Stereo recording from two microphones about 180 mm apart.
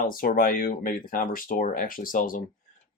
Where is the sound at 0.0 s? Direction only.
50° left (ahead or behind).